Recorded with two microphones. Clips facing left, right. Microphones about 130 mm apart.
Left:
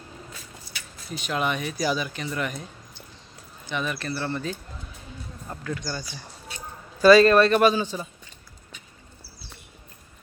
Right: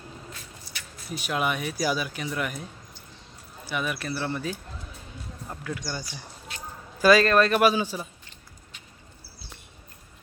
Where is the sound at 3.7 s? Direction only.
5° right (ahead or behind).